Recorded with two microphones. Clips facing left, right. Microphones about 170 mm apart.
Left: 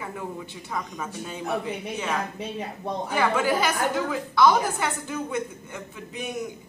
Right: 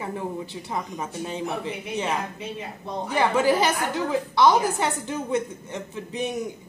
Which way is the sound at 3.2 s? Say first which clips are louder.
Right 3 dB; 30° right (ahead or behind).